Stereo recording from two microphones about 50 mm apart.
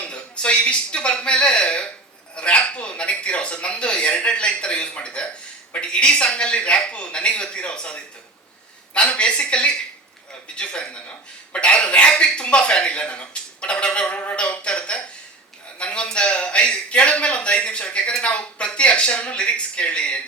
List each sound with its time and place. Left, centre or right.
0.1 s speech: left
14.3 s a sound: left
18.2 s speech: left